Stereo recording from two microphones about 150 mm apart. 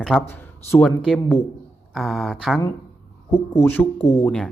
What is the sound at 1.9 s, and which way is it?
Speech, centre (ahead or behind).